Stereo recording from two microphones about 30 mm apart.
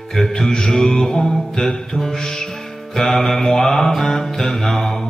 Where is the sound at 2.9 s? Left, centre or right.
Centre.